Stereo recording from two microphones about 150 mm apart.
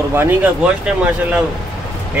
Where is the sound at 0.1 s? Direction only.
15° right (ahead or behind).